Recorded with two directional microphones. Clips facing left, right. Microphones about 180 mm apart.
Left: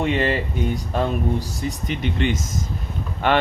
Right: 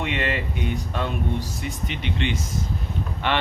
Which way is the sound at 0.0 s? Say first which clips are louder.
Left 5 dB; 35° left (ahead or behind).